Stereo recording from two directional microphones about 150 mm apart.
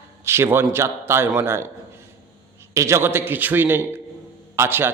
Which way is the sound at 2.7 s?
20° right (ahead or behind).